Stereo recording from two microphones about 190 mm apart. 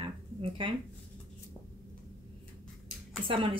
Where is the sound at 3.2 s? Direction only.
30° right (ahead or behind).